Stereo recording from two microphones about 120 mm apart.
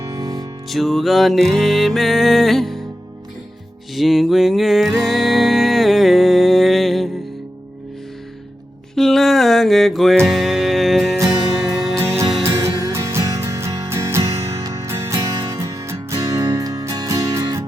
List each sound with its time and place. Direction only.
0.1 s music: 30° right (ahead or behind)
0.7 s music: centre (ahead or behind)
3.9 s music: centre (ahead or behind)
9.0 s music: centre (ahead or behind)
11.9 s music: 20° right (ahead or behind)